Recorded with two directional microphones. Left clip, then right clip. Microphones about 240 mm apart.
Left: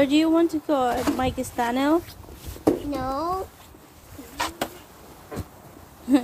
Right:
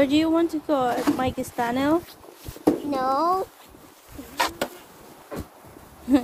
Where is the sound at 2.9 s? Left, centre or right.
Right.